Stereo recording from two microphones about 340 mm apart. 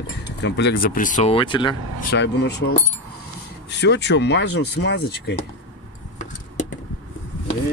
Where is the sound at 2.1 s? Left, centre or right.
Left.